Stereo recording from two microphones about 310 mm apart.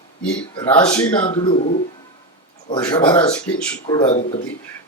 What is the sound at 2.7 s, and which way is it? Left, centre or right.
Speech, centre.